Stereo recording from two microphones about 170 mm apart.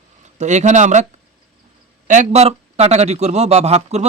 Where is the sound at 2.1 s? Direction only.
45° right (ahead or behind).